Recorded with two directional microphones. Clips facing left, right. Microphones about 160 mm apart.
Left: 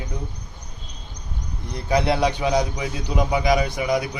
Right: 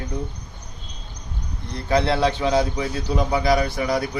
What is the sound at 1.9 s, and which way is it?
A man's voice, 15° left (ahead or behind).